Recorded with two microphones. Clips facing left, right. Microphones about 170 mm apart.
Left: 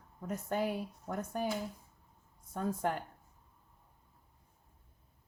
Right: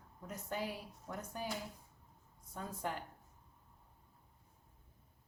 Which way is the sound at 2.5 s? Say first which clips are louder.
Left 8 dB; 50° left (ahead or behind).